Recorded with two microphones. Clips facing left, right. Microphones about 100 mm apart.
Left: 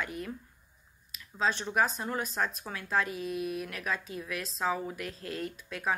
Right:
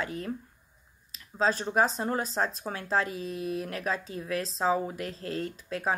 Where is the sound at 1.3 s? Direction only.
35° right (ahead or behind).